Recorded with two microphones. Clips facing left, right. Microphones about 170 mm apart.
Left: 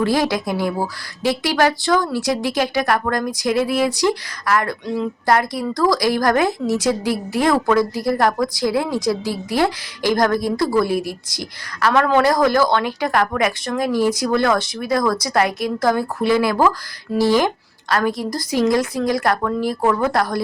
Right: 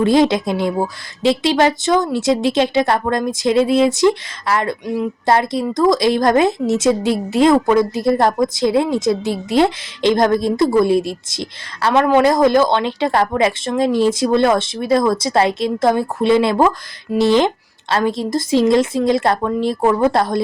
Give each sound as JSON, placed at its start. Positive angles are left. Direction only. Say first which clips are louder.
{"t": 0.0, "sound": "a woman's voice", "louder": "right 5 dB", "side_deg": -25}